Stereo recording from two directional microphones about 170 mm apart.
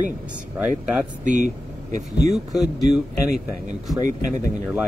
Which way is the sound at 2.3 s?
Centre (ahead or behind).